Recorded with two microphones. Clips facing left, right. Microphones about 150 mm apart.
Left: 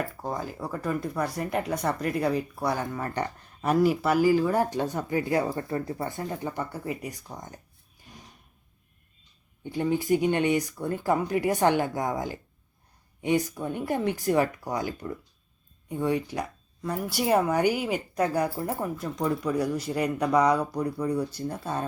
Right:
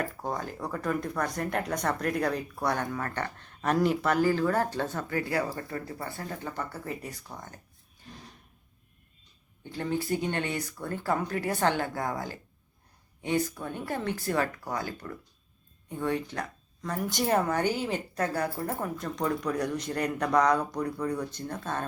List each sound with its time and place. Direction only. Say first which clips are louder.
0.0 s speech: left 1 dB; 5° left (ahead or behind)
8.1 s a sound: right 2 dB; 10° left (ahead or behind)
9.7 s speech: left 5 dB; 15° left (ahead or behind)